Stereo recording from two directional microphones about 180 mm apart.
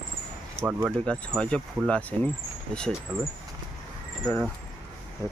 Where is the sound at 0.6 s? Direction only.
15° right (ahead or behind).